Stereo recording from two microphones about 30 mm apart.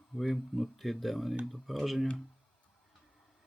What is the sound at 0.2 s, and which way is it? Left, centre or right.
Speech, centre.